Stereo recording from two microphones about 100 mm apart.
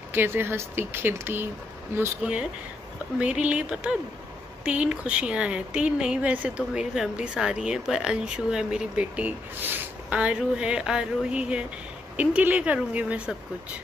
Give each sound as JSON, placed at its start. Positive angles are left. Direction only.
{"t": 0.1, "sound": "speech", "side_deg": -20}
{"t": 2.2, "sound": "speech", "side_deg": -10}